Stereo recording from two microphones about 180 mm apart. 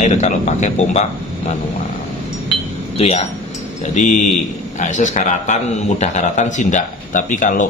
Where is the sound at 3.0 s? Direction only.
35° left (ahead or behind).